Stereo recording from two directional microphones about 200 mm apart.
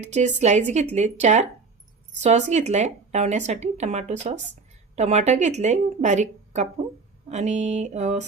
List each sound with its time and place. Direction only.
0.0 s speech: 35° right (ahead or behind)